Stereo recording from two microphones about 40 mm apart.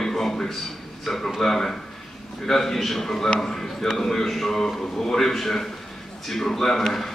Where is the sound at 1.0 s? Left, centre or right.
Centre.